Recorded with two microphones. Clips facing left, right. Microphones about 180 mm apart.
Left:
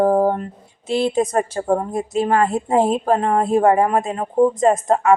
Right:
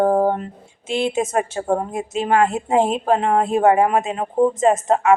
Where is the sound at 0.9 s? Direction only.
35° left (ahead or behind).